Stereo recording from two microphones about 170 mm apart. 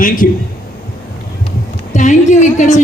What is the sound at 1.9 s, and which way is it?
Speech, 45° left (ahead or behind).